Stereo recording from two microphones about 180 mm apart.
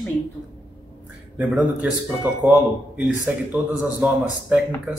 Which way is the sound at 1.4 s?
5° right (ahead or behind).